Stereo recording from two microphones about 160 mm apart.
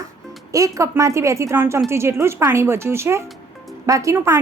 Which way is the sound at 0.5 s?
20° right (ahead or behind).